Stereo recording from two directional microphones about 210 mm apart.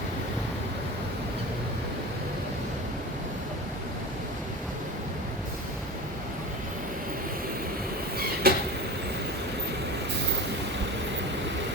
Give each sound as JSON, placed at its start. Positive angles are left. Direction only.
{"t": 8.4, "sound": "vehicle", "side_deg": -45}